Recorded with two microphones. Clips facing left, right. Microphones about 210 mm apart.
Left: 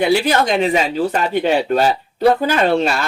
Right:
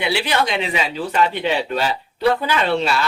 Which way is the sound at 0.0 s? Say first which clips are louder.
Left 6 dB; 45° left (ahead or behind).